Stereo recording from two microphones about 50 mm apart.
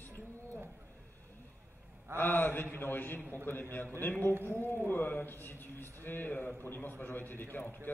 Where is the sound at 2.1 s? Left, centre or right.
Left.